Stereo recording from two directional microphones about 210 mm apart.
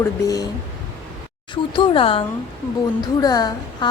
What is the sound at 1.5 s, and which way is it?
Speech, 25° left (ahead or behind).